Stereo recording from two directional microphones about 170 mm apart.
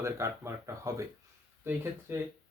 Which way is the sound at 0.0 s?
15° right (ahead or behind).